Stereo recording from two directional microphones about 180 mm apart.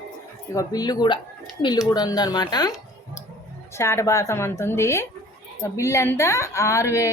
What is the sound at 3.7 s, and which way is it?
Speech, 15° left (ahead or behind).